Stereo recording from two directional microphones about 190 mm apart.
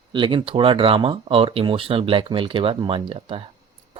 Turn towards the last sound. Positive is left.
turn(degrees=-25)  # may be behind; listen again after turning